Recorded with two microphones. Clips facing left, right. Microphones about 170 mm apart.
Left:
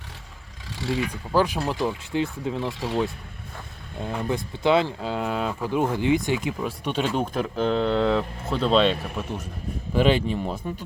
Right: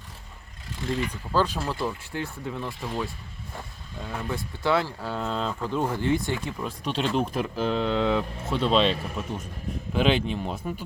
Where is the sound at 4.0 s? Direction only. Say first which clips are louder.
Left 5 dB; 20° left (ahead or behind).